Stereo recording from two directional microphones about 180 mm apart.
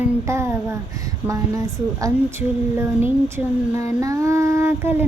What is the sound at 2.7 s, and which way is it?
Child singing, 15° right (ahead or behind).